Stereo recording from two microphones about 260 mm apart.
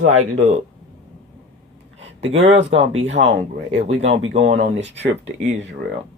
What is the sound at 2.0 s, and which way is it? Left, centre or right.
Speech, right.